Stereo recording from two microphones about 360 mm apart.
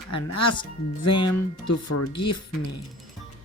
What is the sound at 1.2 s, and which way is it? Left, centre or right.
Speech, left.